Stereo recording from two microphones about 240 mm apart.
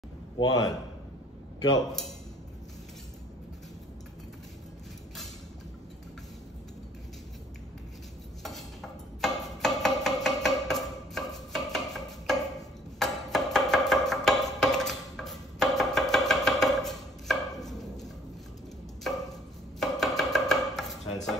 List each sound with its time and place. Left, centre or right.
0.4 s a man's voice: centre
8.4 s dishes: centre
9.2 s a sound: centre